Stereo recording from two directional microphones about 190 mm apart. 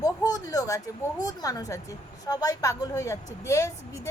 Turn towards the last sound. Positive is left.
turn(degrees=15)  # may be behind; listen again after turning